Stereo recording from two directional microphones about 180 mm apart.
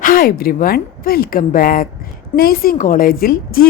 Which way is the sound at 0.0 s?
50° left (ahead or behind).